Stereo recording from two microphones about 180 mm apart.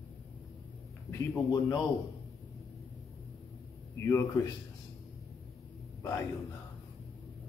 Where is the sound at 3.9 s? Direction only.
15° left (ahead or behind).